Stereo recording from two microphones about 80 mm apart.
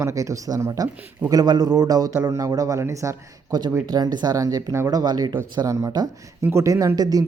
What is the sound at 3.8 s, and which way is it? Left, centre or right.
Speech, right.